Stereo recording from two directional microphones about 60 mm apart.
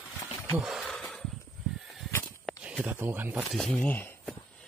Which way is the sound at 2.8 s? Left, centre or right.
Right.